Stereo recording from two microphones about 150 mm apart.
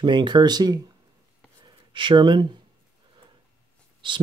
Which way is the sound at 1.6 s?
30° right (ahead or behind).